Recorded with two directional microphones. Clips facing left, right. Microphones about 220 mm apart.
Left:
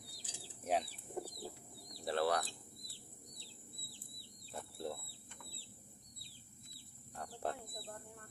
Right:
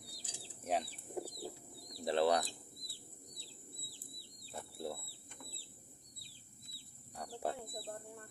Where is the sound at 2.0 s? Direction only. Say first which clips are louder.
Right 3 dB; 20° right (ahead or behind).